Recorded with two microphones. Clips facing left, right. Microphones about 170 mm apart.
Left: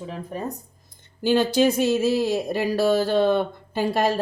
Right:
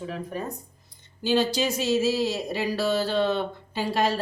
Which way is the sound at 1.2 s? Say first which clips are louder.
Left 5 dB; 55° left (ahead or behind).